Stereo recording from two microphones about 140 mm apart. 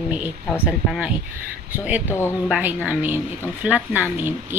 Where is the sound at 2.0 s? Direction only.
15° left (ahead or behind).